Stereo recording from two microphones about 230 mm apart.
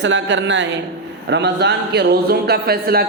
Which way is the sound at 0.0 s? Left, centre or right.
Right.